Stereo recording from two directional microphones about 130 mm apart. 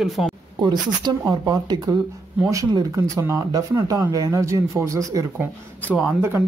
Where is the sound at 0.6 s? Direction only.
35° right (ahead or behind).